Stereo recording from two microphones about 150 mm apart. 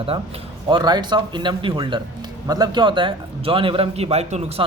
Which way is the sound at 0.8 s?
30° right (ahead or behind).